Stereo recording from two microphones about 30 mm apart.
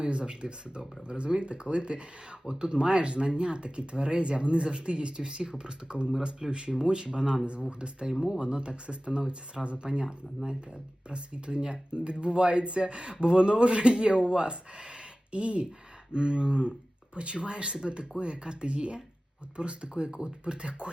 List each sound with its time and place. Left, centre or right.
0.0 s speech: right
16.1 s speech: right